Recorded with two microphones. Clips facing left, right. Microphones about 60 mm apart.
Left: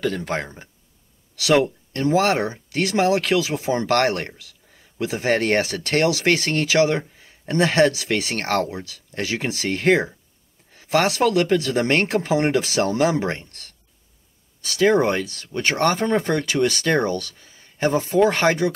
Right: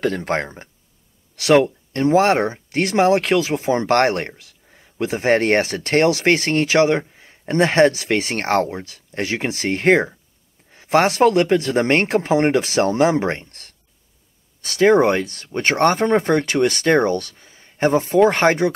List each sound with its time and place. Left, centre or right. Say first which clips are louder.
0.0 s speech: right 3 dB; right